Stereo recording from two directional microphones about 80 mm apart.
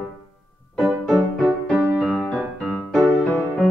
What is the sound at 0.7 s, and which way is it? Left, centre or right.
Music, centre.